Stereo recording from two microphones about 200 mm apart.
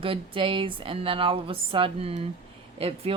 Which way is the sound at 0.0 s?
25° right (ahead or behind).